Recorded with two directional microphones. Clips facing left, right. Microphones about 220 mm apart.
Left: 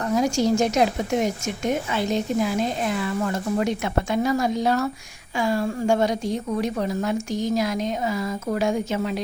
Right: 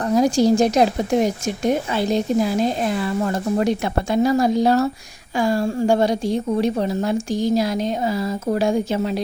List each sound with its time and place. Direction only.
0.0 s a woman's voice: 35° right (ahead or behind)